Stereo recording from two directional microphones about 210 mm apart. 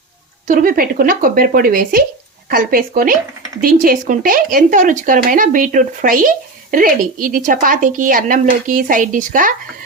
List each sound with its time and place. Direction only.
0.4 s speech: 40° right (ahead or behind)